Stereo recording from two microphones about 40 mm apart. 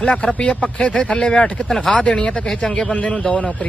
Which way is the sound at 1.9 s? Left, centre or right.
Left.